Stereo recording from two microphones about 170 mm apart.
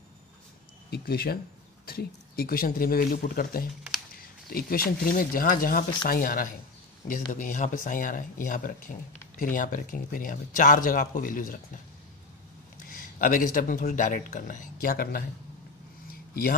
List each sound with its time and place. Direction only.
0.8 s speech: 65° left (ahead or behind)
12.9 s speech: 55° left (ahead or behind)
16.1 s a sound: 60° left (ahead or behind)